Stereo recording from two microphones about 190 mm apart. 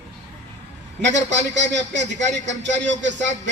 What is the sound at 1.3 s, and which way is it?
Speech, 70° right (ahead or behind).